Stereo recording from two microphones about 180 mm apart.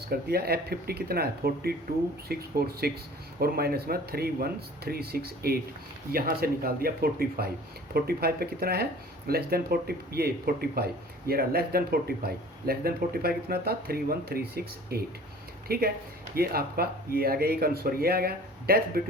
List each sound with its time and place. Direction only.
0.1 s speech: 60° right (ahead or behind)